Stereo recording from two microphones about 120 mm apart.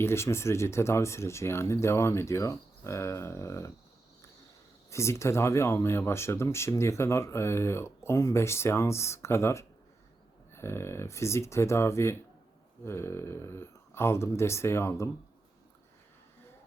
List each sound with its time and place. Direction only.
0.0 s speech: 20° left (ahead or behind)
4.9 s speech: 25° left (ahead or behind)